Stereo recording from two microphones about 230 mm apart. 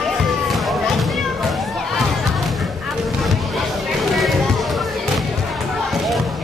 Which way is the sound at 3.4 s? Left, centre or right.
Centre.